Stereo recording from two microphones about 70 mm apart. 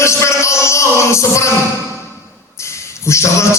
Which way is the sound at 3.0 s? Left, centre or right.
Left.